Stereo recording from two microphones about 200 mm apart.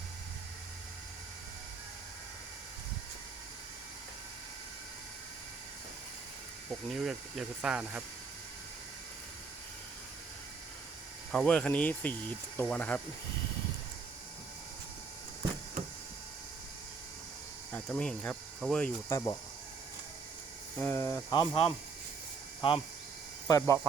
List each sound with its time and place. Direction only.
6.7 s speech: centre (ahead or behind)
11.3 s speech: 5° left (ahead or behind)
17.7 s speech: 5° left (ahead or behind)
19.1 s speech: 20° left (ahead or behind)
20.7 s speech: 15° left (ahead or behind)
23.5 s speech: 15° left (ahead or behind)